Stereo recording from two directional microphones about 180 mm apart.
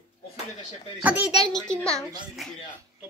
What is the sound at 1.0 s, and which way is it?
Speech, 10° right (ahead or behind).